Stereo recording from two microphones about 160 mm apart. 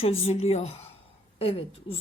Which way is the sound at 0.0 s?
40° left (ahead or behind).